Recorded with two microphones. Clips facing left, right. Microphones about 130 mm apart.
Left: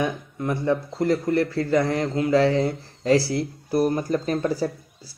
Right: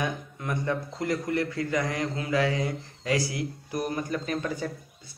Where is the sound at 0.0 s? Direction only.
20° left (ahead or behind).